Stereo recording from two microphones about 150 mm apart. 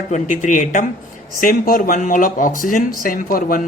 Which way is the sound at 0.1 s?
55° left (ahead or behind).